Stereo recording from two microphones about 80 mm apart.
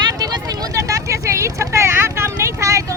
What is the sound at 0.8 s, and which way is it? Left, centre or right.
Vehicle, right.